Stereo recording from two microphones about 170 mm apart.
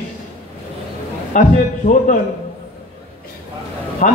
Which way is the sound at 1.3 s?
45° left (ahead or behind).